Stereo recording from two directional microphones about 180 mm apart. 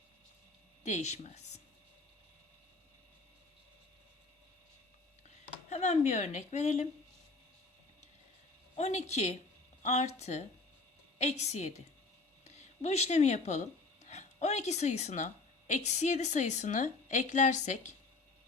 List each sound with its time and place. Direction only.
0.9 s speech: 40° left (ahead or behind)
5.6 s speech: 40° left (ahead or behind)
8.7 s a woman's voice: 35° left (ahead or behind)